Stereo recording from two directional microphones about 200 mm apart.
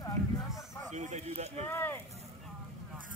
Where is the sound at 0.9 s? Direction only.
35° right (ahead or behind).